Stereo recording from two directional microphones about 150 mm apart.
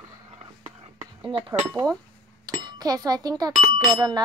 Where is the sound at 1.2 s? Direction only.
30° right (ahead or behind).